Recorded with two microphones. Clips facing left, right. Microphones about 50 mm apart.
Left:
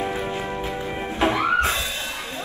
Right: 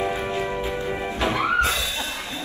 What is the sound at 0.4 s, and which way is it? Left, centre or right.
Music, left.